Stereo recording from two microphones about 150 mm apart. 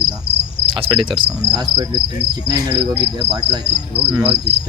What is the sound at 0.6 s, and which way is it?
Cricket, 35° right (ahead or behind).